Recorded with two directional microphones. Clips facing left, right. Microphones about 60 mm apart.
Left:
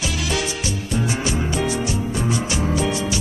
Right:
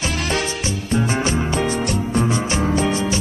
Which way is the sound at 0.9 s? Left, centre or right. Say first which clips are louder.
Right 4 dB; right.